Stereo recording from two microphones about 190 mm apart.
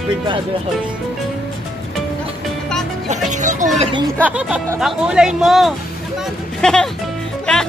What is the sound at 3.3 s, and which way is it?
Speech, 40° right (ahead or behind).